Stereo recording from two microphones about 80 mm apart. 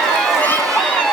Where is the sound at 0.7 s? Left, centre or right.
Centre.